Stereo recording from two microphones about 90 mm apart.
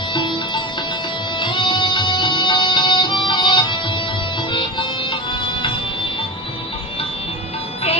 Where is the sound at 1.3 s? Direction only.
60° left (ahead or behind).